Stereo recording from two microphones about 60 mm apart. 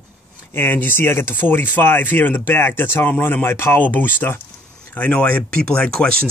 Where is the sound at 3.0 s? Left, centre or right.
Left.